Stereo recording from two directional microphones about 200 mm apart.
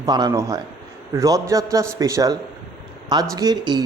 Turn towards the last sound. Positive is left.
turn(degrees=-20)  # may be behind; listen again after turning